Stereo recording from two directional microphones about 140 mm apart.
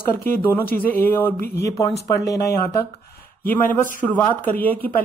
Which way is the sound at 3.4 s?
15° left (ahead or behind).